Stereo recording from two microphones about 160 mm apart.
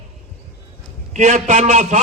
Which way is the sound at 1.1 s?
45° right (ahead or behind).